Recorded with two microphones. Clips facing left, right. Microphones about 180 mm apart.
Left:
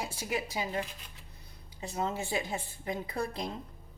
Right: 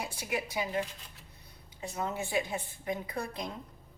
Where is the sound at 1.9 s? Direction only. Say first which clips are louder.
Even; 25° left (ahead or behind).